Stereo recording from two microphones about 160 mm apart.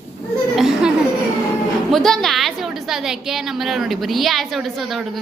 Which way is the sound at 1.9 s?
Centre (ahead or behind).